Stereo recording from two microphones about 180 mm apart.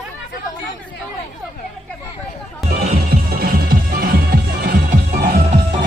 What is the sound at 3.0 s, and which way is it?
Music, 60° right (ahead or behind).